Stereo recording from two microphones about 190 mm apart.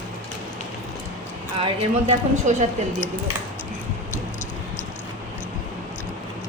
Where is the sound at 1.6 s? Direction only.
35° right (ahead or behind).